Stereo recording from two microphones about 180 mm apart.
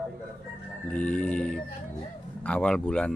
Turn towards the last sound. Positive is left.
turn(degrees=5)  # may be behind; listen again after turning